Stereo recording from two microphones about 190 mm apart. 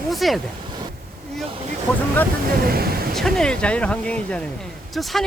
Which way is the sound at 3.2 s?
Centre (ahead or behind).